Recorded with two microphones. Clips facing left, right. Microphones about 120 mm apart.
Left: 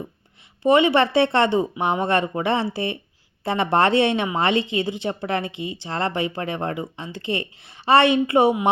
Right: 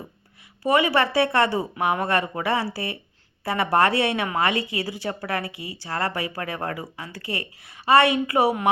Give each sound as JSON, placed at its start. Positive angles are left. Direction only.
{"t": 0.6, "sound": "a woman's voice", "side_deg": 25}